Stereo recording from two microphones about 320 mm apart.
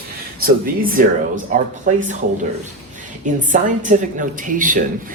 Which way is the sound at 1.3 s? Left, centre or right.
Right.